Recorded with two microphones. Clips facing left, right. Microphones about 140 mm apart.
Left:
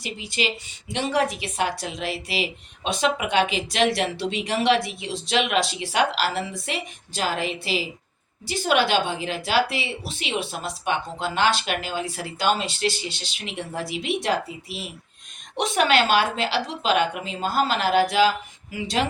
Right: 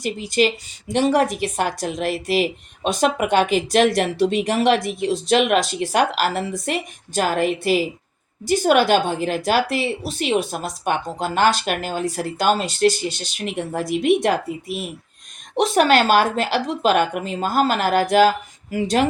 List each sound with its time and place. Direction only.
0.0 s a woman's voice: 45° right (ahead or behind)
15.5 s a woman's voice: 40° right (ahead or behind)